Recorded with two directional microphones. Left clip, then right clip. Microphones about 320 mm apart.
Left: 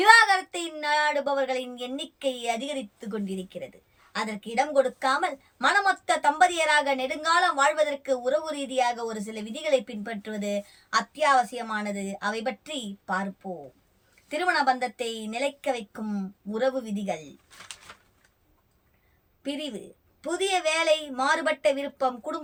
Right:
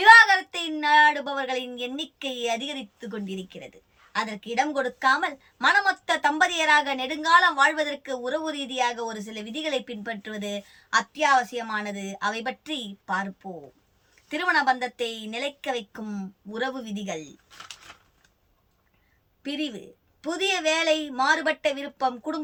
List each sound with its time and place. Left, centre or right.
0.0 s a woman's voice: centre
13.4 s a woman's voice: centre
14.3 s a woman's voice: centre
19.4 s a woman's voice: centre